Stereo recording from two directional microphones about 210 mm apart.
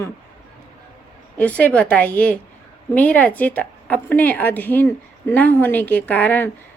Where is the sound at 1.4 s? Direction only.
5° left (ahead or behind).